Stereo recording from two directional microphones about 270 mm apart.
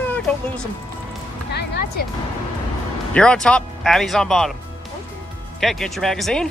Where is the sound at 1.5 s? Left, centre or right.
Left.